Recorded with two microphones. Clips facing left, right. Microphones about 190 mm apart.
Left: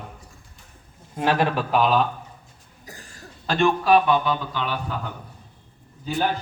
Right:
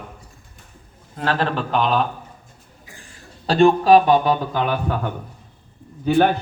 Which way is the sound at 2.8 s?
40° left (ahead or behind).